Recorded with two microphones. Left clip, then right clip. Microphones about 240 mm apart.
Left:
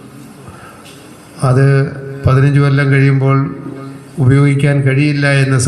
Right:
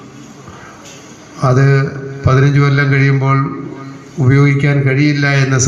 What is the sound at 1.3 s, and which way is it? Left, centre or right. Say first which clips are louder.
A man's voice: even; left.